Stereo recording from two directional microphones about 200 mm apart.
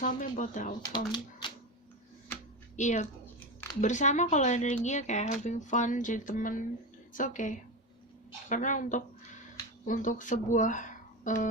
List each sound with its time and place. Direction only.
0.0 s speech: 40° left (ahead or behind)
0.9 s speech: 25° left (ahead or behind)
2.7 s speech: 35° left (ahead or behind)